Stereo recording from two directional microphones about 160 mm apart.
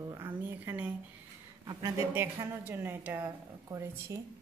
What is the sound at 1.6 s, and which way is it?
A woman's voice, 20° right (ahead or behind).